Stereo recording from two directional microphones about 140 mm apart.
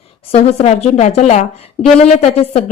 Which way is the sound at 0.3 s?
45° left (ahead or behind).